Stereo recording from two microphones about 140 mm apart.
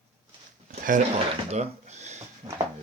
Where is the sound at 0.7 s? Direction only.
70° right (ahead or behind).